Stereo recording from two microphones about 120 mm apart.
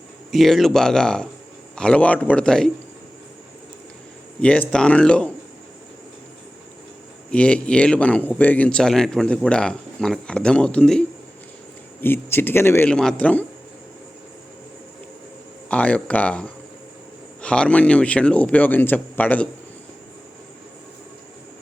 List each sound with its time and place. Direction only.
0.3 s speech: centre (ahead or behind)
4.4 s speech: 10° left (ahead or behind)
7.3 s speech: 10° left (ahead or behind)
11.9 s speech: 15° left (ahead or behind)
12.9 s speech: 5° left (ahead or behind)
15.7 s speech: 10° left (ahead or behind)